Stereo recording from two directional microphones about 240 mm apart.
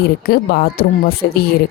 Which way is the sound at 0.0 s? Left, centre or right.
Left.